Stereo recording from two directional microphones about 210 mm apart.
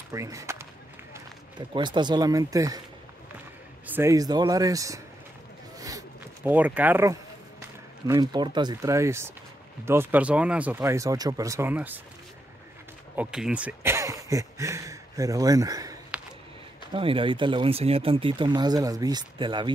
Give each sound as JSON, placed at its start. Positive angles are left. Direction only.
{"t": 0.1, "sound": "speech", "side_deg": -15}
{"t": 1.7, "sound": "speech", "side_deg": -20}
{"t": 3.8, "sound": "speech", "side_deg": -10}
{"t": 5.8, "sound": "zipper", "side_deg": -15}
{"t": 8.1, "sound": "speech", "side_deg": -20}
{"t": 13.1, "sound": "speech", "side_deg": -5}